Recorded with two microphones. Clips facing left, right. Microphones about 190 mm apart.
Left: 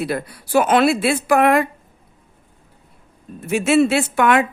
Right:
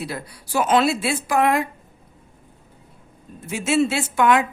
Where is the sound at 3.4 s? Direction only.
65° left (ahead or behind).